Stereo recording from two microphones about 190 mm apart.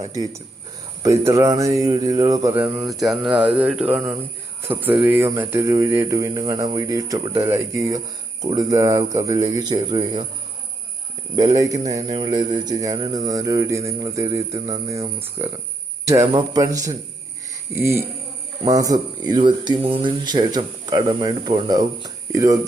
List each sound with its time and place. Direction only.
0.0 s speech: 20° right (ahead or behind)
11.3 s speech: 20° right (ahead or behind)